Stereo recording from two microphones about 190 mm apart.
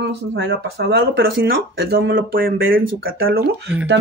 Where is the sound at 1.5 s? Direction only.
60° right (ahead or behind).